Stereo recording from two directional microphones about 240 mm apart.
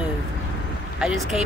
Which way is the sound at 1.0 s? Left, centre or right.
Centre.